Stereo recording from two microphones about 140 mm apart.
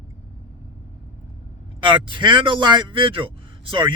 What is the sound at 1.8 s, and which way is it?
A man's voice, 35° right (ahead or behind).